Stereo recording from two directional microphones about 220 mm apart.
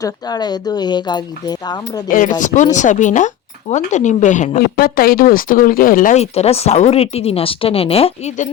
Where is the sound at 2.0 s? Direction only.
35° left (ahead or behind).